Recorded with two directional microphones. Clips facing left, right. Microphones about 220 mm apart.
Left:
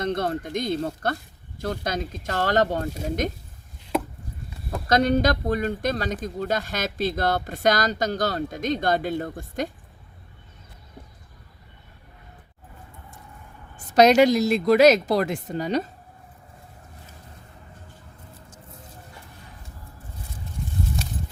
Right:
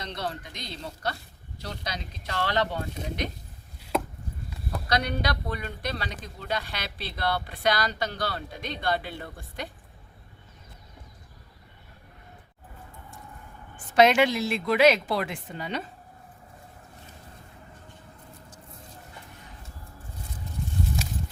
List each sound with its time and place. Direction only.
0.0 s speech: 50° left (ahead or behind)
4.9 s speech: 45° left (ahead or behind)
13.7 s a woman's voice: 40° left (ahead or behind)